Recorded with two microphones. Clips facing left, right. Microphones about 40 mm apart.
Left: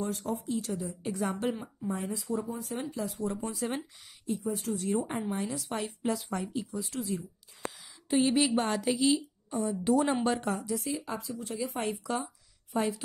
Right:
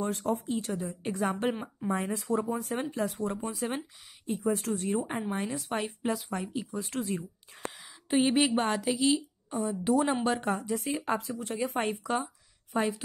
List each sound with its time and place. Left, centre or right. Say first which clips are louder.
0.0 s speech: right 3 dB; right
0.6 s a woman's voice: right 1 dB; right
1.8 s speech: right 3 dB; right
3.3 s speech: right 1 dB; centre
4.3 s speech: right 3 dB; right
4.8 s speech: left 3 dB; centre
5.4 s a woman's voice: right 1 dB; right
6.1 s a woman's voice: even; centre
6.7 s speech: right 1 dB; right
7.7 s a sound: right 1 dB; right
8.5 s a woman's voice: right 1 dB; centre
10.4 s speech: right 2 dB; right
10.7 s speech: right 3 dB; right
12.0 s speech: right 2 dB; right